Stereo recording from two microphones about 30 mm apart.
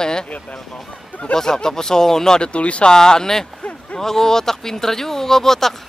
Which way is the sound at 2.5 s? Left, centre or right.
Left.